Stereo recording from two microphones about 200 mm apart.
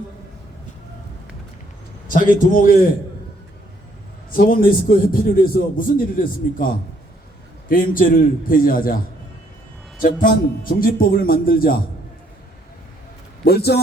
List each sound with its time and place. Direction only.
2.0 s a man's voice: 40° left (ahead or behind)
4.3 s a man's voice: 45° left (ahead or behind)
7.7 s a man's voice: 45° left (ahead or behind)
10.0 s a man's voice: 40° left (ahead or behind)
13.4 s a man's voice: 50° left (ahead or behind)